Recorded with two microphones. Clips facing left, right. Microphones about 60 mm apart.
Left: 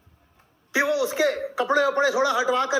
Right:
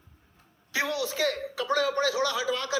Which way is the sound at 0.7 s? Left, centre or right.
Centre.